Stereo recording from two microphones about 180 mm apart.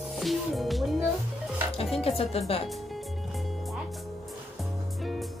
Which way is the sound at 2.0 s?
35° left (ahead or behind).